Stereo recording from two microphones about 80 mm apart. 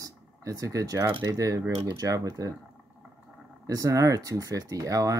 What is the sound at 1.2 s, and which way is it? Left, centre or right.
Speech, right.